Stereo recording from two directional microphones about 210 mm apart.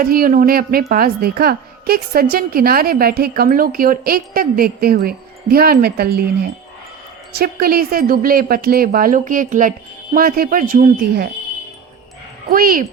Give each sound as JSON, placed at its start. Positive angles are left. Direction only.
{"t": 0.0, "sound": "speech", "side_deg": -45}
{"t": 7.3, "sound": "speech", "side_deg": -45}
{"t": 12.5, "sound": "speech", "side_deg": -40}